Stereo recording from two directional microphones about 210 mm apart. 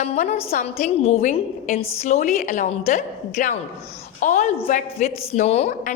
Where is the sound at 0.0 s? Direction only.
30° left (ahead or behind).